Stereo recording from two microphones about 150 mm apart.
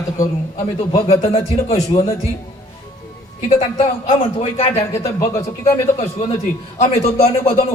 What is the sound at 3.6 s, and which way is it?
Speech, 50° left (ahead or behind).